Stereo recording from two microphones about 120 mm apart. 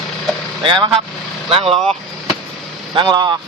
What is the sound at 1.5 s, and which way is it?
Speech, 50° right (ahead or behind).